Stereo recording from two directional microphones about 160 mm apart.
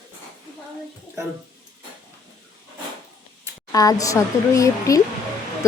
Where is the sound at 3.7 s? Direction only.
20° left (ahead or behind).